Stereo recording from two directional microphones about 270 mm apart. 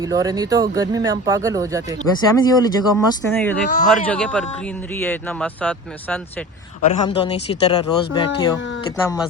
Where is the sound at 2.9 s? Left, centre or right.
Centre.